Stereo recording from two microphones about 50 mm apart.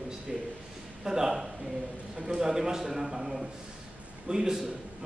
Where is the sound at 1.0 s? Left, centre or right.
Centre.